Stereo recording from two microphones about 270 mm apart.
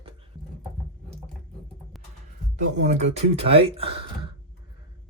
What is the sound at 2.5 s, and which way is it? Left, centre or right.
Speech, right.